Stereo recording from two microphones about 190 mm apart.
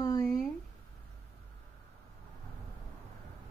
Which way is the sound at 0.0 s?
20° left (ahead or behind).